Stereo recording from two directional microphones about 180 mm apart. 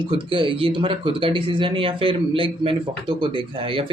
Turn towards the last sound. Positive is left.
turn(degrees=-30)  # may be behind; listen again after turning